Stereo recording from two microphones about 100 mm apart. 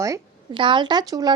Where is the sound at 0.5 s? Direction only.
55° right (ahead or behind).